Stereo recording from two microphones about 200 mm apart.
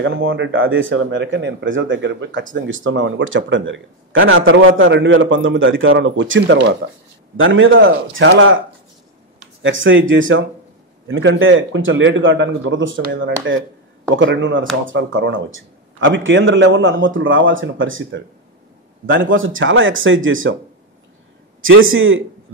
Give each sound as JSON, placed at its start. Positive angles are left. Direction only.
{"t": 0.0, "sound": "speech", "side_deg": -70}
{"t": 9.6, "sound": "speech", "side_deg": -70}
{"t": 21.5, "sound": "a man's voice", "side_deg": -85}